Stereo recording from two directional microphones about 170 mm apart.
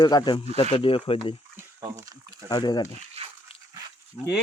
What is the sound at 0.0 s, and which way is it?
Speech, 25° left (ahead or behind).